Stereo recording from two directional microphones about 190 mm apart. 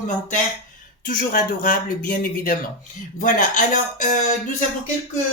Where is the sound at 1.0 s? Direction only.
45° left (ahead or behind).